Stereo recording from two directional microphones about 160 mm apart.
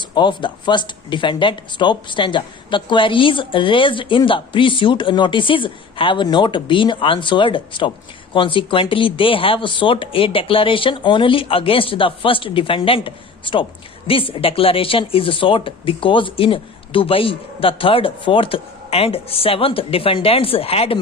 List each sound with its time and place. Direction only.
0.0 s speech: 30° left (ahead or behind)